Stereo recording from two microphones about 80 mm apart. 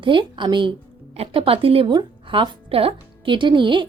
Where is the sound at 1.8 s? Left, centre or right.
Right.